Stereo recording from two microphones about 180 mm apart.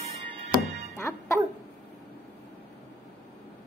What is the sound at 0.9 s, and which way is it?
Speech, 15° left (ahead or behind).